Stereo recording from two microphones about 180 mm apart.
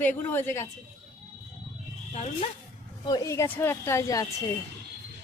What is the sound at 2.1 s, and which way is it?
Speech, 35° left (ahead or behind).